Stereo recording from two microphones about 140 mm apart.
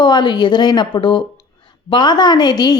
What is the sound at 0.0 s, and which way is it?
A woman's voice, 30° left (ahead or behind).